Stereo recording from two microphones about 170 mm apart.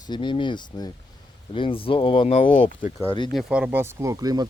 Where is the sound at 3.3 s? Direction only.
5° right (ahead or behind).